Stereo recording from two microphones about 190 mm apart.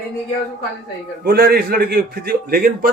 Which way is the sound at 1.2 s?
50° right (ahead or behind).